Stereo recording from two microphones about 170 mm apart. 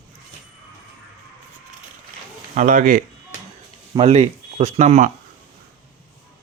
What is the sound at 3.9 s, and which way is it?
Speech, 35° right (ahead or behind).